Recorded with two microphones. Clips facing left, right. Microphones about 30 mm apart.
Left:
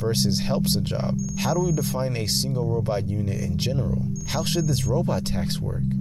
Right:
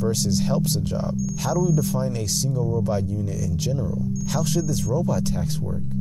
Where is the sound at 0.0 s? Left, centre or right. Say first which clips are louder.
Right 1 dB; left.